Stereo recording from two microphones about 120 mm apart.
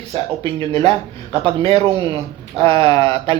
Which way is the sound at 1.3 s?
55° right (ahead or behind).